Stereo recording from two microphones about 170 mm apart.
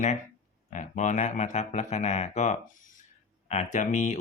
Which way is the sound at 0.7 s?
45° left (ahead or behind).